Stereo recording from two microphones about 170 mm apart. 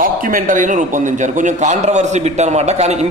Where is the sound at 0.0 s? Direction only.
55° right (ahead or behind).